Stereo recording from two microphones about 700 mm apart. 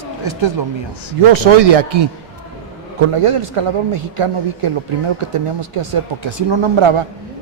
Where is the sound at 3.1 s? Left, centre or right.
Right.